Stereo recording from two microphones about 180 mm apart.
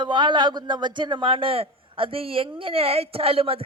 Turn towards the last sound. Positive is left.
turn(degrees=-30)  # may be behind; listen again after turning